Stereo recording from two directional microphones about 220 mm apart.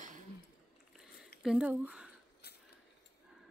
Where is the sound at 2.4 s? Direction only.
50° left (ahead or behind).